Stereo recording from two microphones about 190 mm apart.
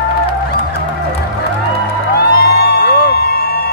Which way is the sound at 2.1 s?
55° left (ahead or behind).